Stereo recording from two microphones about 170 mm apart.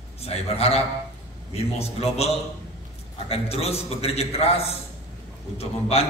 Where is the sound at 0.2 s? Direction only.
35° left (ahead or behind).